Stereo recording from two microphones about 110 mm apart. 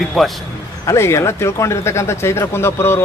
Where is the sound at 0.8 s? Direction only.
25° left (ahead or behind).